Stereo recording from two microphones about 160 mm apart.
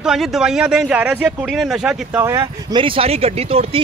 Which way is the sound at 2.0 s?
15° right (ahead or behind).